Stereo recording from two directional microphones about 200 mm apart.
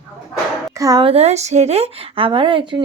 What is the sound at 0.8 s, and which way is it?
A woman's voice, 20° right (ahead or behind).